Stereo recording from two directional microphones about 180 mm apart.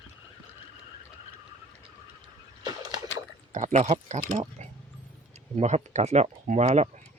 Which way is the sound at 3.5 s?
40° right (ahead or behind).